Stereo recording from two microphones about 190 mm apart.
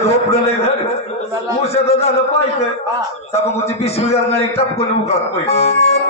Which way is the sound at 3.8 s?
35° left (ahead or behind).